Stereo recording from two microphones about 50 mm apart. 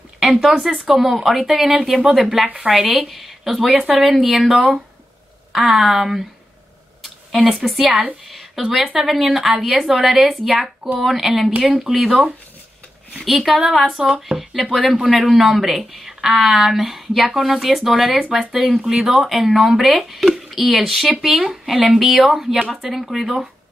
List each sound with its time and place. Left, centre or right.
0.2 s speech: centre
4.5 s speech: centre
7.4 s speech: centre
8.3 s a sound: centre
8.9 s speech: centre
12.1 s speech: right
13.2 s speech: centre
14.5 s speech: centre